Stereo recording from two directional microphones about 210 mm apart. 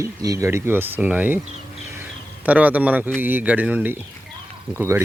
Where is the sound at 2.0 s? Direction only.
10° right (ahead or behind).